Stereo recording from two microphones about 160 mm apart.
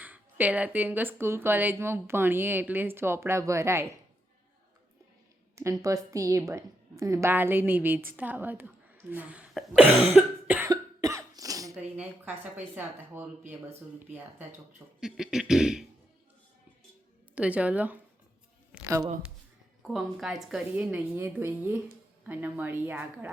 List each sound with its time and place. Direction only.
0.0 s speech: 10° right (ahead or behind)
5.8 s a woman's voice: 20° right (ahead or behind)
10.7 s cough: 20° right (ahead or behind)
11.8 s speech: 10° right (ahead or behind)
17.3 s speech: 10° right (ahead or behind)
19.8 s speech: centre (ahead or behind)